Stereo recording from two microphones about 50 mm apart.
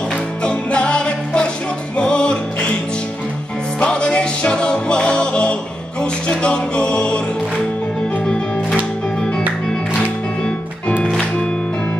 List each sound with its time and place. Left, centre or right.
0.4 s music: left
3.8 s music: centre